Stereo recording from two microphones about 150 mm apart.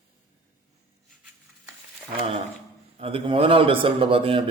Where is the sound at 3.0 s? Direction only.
35° right (ahead or behind).